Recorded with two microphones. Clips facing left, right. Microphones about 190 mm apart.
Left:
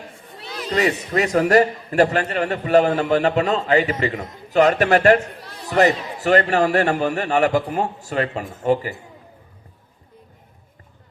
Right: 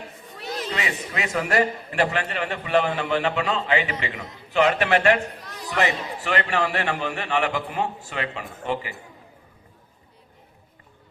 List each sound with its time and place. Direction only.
0.7 s a man's voice: 40° left (ahead or behind)